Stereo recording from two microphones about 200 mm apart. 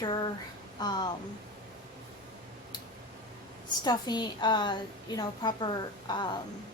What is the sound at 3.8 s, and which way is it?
Speech, 20° left (ahead or behind).